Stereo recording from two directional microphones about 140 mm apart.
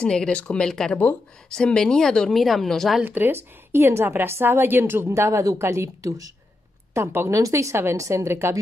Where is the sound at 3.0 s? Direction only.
15° right (ahead or behind).